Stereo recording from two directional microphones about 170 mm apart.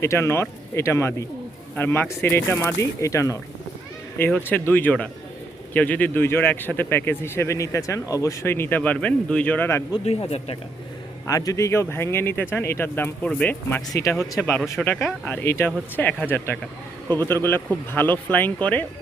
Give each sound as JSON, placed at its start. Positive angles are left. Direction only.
{"t": 0.0, "sound": "speech", "side_deg": 15}
{"t": 10.0, "sound": "speech", "side_deg": 35}
{"t": 11.3, "sound": "speech", "side_deg": 20}
{"t": 14.6, "sound": "speech", "side_deg": 5}